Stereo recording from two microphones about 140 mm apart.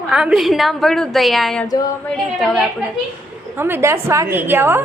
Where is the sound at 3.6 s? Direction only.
15° right (ahead or behind).